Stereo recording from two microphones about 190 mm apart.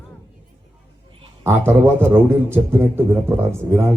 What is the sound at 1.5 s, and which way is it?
A man's voice, 10° right (ahead or behind).